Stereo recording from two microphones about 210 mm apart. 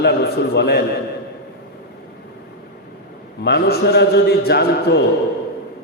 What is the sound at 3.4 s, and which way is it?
A man's voice, 50° left (ahead or behind).